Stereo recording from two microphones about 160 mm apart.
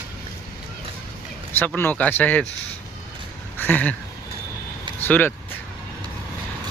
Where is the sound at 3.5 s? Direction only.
10° left (ahead or behind).